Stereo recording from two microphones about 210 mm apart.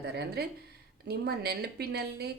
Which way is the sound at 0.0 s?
50° right (ahead or behind).